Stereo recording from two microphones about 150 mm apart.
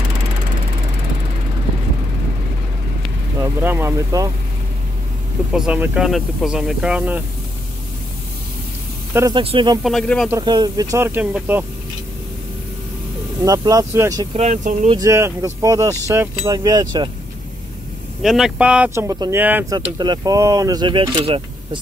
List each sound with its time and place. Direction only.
3.3 s speech: 15° right (ahead or behind)
5.5 s speech: 5° right (ahead or behind)
9.3 s speech: 35° right (ahead or behind)
9.8 s speech: 5° left (ahead or behind)
10.3 s speech: 30° right (ahead or behind); by 11.6 s 10° right (ahead or behind)
13.4 s speech: 25° right (ahead or behind)
14.3 s speech: 50° right (ahead or behind)
15.0 s speech: 20° right (ahead or behind)
18.2 s speech: centre (ahead or behind)
18.9 s speech: 25° right (ahead or behind)
19.3 s speech: 10° right (ahead or behind)
19.7 s speech: 25° right (ahead or behind)